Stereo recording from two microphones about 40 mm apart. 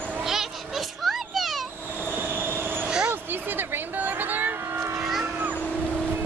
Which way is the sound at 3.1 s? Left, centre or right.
Right.